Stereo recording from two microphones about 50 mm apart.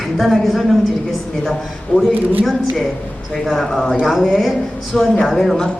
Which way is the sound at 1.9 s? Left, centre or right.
Centre.